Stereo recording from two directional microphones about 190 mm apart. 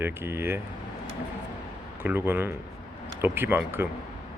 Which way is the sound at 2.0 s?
10° right (ahead or behind).